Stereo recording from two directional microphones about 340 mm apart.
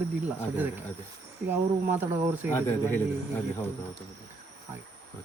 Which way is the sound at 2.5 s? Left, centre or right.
Centre.